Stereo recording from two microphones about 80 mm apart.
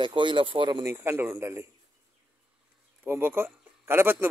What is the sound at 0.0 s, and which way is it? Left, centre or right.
Speech, right.